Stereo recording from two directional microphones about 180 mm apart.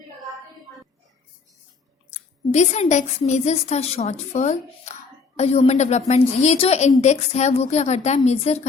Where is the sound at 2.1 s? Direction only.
40° left (ahead or behind).